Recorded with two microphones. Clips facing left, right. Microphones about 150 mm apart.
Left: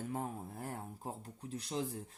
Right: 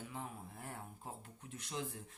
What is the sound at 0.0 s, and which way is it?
Speech, 45° left (ahead or behind).